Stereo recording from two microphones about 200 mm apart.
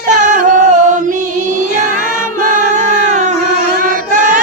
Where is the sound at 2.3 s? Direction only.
40° right (ahead or behind).